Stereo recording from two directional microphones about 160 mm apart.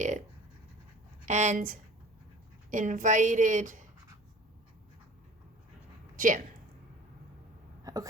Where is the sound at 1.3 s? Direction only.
50° right (ahead or behind).